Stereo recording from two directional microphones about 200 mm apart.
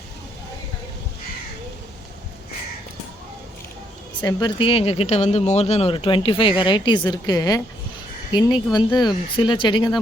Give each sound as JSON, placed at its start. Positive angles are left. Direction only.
{"t": 4.2, "sound": "speech", "side_deg": 20}